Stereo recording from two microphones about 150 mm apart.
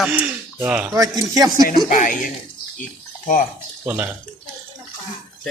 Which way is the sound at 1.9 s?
60° left (ahead or behind).